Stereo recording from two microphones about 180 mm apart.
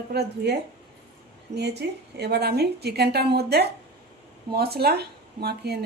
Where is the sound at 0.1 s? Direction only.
65° right (ahead or behind).